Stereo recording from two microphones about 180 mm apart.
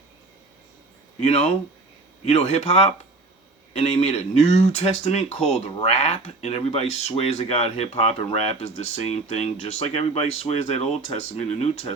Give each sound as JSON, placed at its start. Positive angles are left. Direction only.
{"t": 1.2, "sound": "speech", "side_deg": 35}